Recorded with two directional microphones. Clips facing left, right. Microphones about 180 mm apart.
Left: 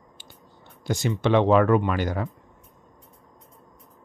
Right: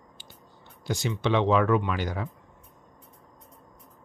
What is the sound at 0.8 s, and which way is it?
Speech, 45° left (ahead or behind).